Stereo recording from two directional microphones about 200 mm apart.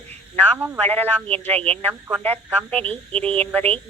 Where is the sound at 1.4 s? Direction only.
30° right (ahead or behind).